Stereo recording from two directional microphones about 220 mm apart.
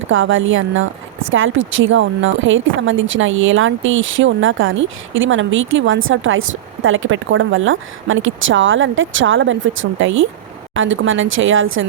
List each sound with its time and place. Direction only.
0.1 s speech: 65° right (ahead or behind)